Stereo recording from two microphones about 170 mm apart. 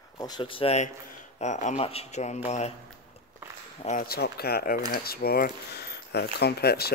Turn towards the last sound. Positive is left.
turn(degrees=70)  # may be behind; listen again after turning